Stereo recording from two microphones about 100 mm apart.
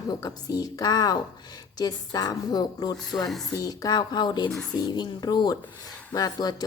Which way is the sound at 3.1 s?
Centre (ahead or behind).